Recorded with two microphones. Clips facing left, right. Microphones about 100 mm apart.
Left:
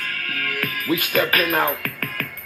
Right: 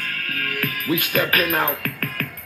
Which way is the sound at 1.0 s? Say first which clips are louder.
Even; centre (ahead or behind).